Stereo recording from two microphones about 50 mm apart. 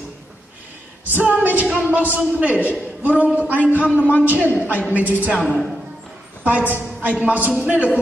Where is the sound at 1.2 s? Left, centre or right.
Right.